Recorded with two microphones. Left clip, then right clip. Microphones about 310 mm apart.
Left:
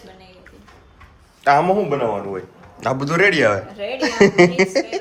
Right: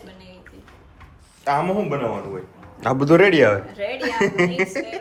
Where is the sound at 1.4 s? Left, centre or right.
Left.